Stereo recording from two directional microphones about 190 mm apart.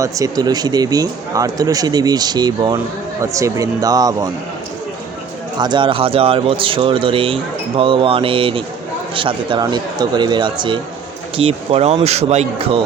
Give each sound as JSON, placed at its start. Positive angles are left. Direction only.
{"t": 0.0, "sound": "speech", "side_deg": -20}
{"t": 5.5, "sound": "speech", "side_deg": -25}